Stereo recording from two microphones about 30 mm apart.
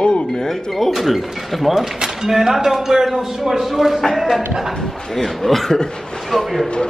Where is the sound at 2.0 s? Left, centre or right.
Centre.